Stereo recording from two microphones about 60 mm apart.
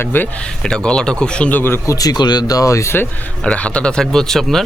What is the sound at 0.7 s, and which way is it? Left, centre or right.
Speech, centre.